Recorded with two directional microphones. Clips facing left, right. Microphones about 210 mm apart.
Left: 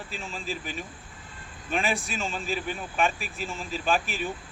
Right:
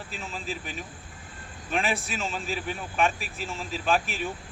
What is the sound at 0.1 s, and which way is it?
Speech, centre (ahead or behind).